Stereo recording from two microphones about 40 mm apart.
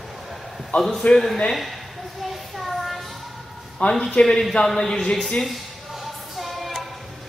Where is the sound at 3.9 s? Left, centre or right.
Centre.